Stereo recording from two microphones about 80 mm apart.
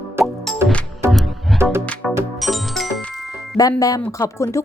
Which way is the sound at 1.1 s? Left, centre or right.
Centre.